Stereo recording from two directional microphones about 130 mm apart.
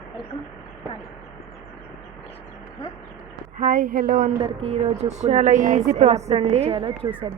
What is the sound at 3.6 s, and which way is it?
Speech, 85° right.